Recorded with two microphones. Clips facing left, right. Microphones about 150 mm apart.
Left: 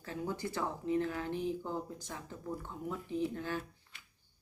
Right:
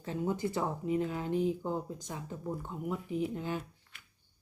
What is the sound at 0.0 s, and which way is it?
Speech, 20° right (ahead or behind).